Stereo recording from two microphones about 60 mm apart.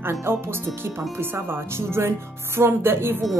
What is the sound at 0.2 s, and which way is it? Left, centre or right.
A woman's voice, right.